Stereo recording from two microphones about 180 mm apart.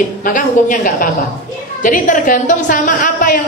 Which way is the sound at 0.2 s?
45° left (ahead or behind).